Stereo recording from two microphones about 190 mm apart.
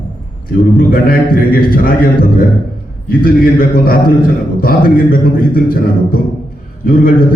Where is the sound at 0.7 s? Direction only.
50° left (ahead or behind).